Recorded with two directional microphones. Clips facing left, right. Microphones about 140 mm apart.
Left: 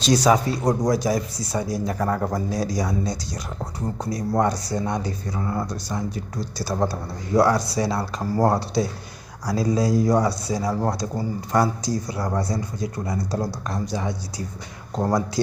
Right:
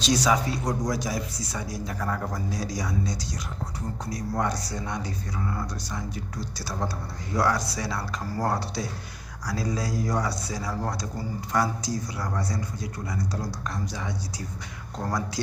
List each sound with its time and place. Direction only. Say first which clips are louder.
0.0 s speech: left 5 dB; 40° left (ahead or behind)